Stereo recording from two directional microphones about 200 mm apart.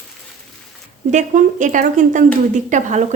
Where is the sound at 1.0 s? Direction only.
40° right (ahead or behind).